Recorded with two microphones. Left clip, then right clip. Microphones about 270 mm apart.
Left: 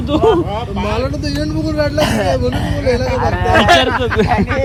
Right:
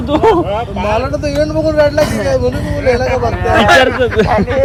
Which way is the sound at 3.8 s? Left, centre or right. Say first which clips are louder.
Right 3 dB; centre.